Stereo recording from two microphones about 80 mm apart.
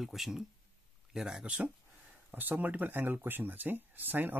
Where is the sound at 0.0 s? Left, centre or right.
Centre.